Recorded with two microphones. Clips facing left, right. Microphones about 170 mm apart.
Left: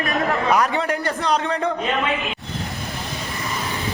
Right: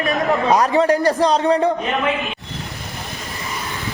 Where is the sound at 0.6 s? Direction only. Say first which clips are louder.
Right 7 dB; 40° right (ahead or behind).